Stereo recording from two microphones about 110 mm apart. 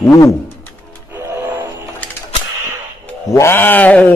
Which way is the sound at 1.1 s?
20° right (ahead or behind).